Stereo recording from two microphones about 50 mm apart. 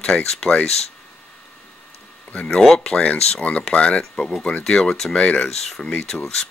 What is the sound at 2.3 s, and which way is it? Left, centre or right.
Speech, left.